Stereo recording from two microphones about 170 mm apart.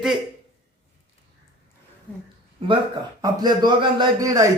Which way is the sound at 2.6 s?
30° right (ahead or behind).